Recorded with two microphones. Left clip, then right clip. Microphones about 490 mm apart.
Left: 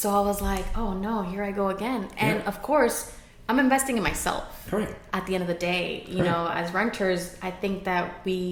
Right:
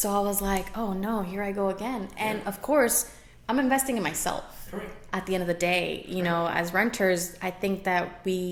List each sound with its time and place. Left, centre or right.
0.0 s a woman's voice: right